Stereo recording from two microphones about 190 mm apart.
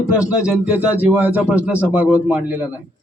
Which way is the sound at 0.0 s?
15° left (ahead or behind).